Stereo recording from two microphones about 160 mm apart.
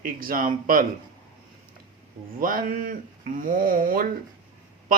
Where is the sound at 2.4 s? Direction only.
60° right (ahead or behind).